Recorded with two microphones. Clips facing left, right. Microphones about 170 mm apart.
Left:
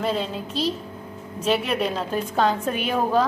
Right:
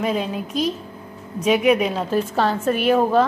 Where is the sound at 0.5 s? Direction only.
30° left (ahead or behind).